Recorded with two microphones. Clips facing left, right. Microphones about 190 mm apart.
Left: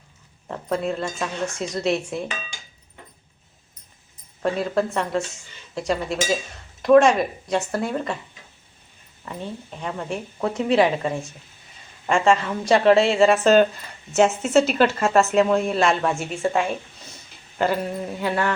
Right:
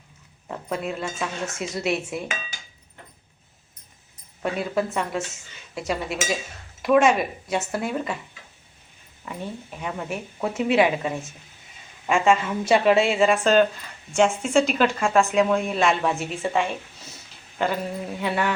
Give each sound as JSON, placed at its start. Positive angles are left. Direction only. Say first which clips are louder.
{"t": 0.4, "sound": "a woman's voice", "louder": "left 4 dB", "side_deg": -5}
{"t": 4.4, "sound": "a woman's voice", "louder": "left 3 dB", "side_deg": -5}
{"t": 9.2, "sound": "a woman's voice", "louder": "left 1 dB", "side_deg": -5}